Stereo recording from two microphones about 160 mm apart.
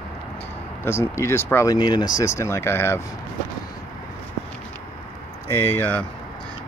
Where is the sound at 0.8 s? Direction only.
15° left (ahead or behind).